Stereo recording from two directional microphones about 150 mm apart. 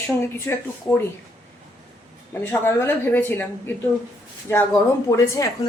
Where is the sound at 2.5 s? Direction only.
15° left (ahead or behind).